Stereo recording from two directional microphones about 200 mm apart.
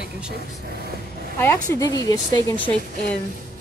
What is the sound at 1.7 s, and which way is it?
Speech, 20° left (ahead or behind).